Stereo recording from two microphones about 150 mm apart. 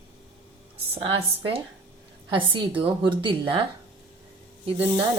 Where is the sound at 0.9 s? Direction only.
40° right (ahead or behind).